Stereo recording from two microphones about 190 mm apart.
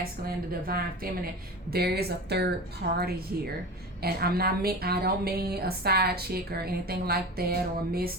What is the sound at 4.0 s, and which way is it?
A woman's voice, 55° right (ahead or behind).